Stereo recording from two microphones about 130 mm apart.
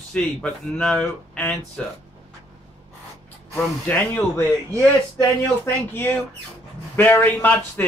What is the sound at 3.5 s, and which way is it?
A man's voice, 15° left (ahead or behind).